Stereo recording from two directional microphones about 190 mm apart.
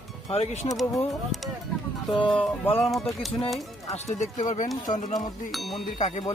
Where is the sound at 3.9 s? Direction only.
35° left (ahead or behind).